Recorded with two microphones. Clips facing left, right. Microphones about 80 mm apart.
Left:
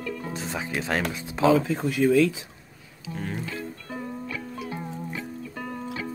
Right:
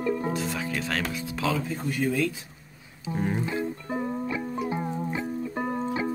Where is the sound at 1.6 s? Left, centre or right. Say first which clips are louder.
Left 5 dB; left.